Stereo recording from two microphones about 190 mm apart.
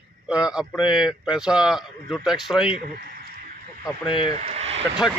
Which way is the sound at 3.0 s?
50° right (ahead or behind).